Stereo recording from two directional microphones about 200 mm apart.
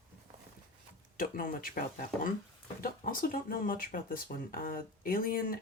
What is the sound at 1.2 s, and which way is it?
Speech, 45° left (ahead or behind).